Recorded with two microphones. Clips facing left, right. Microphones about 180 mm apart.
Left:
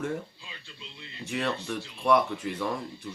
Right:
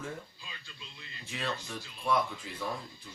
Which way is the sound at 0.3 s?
25° left (ahead or behind).